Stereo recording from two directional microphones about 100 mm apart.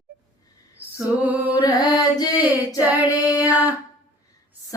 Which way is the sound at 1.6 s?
45° left (ahead or behind).